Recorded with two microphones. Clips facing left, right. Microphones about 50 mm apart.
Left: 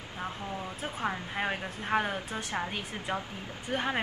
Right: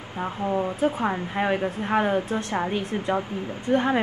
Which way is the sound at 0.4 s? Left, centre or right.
Right.